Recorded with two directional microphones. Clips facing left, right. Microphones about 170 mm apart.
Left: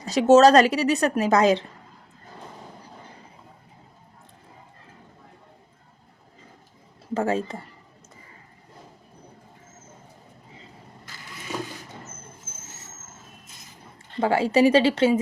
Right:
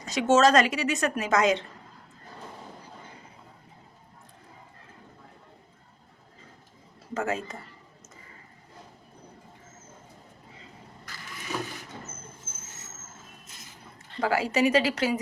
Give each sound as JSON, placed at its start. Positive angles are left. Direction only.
{"t": 0.0, "sound": "a woman's voice", "side_deg": 35}
{"t": 7.1, "sound": "speech", "side_deg": 30}
{"t": 14.2, "sound": "speech", "side_deg": 25}